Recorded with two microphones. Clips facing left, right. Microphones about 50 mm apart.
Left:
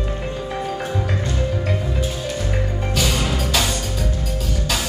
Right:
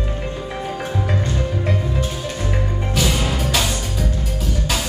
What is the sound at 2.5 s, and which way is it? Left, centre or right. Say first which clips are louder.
Music: even; centre.